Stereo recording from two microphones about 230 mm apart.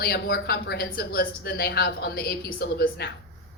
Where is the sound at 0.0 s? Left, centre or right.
Left.